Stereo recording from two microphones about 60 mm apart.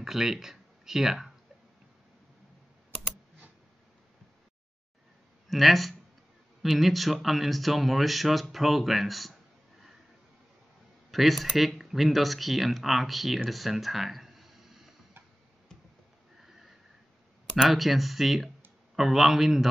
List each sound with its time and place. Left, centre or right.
0.0 s speech: centre
5.5 s speech: centre
11.1 s speech: centre
16.4 s sniff: centre
17.6 s speech: centre